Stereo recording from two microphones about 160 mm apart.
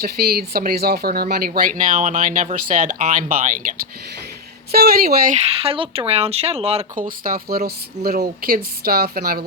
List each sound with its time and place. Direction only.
0.0 s speech: 75° right (ahead or behind); by 3.5 s 55° right (ahead or behind)
4.7 s speech: 70° right (ahead or behind)
5.5 s speech: 35° right (ahead or behind)
7.3 s speech: 70° right (ahead or behind)